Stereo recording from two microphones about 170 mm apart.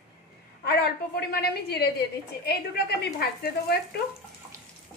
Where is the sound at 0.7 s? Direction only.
70° left (ahead or behind).